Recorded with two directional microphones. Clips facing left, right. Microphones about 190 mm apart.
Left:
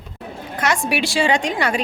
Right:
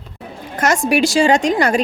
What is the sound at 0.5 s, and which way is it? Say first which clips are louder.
A woman's voice: right 5 dB; 45° right (ahead or behind).